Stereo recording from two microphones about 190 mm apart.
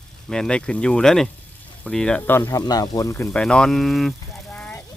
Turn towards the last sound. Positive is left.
turn(degrees=5)  # may be behind; listen again after turning